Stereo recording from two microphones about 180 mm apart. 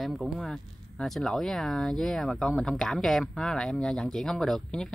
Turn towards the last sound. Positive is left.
turn(degrees=5)  # may be behind; listen again after turning